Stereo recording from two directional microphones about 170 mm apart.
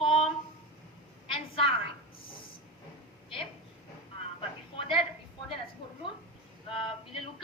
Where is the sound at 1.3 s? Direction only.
30° left (ahead or behind).